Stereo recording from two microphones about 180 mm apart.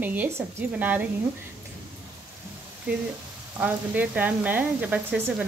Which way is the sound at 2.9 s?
10° right (ahead or behind).